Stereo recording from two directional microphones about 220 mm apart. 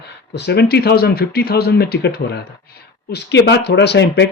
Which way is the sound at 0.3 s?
50° left (ahead or behind).